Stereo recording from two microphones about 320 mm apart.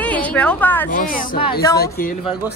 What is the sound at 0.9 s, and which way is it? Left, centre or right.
A woman's voice, left.